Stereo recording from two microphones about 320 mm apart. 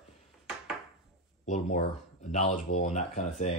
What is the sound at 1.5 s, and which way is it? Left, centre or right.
Speech, left.